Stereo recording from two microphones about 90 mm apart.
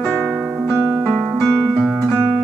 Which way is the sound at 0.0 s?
10° left (ahead or behind).